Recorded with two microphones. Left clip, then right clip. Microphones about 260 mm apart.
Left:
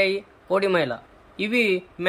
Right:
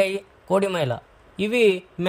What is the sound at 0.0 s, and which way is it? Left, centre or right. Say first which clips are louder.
A man's voice: even; right.